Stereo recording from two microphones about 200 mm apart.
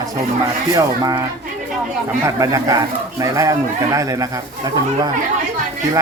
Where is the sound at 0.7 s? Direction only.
20° right (ahead or behind).